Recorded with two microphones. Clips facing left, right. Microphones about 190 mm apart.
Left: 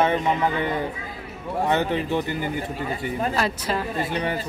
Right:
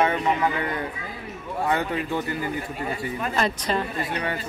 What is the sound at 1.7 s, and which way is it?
Speech, 25° left (ahead or behind).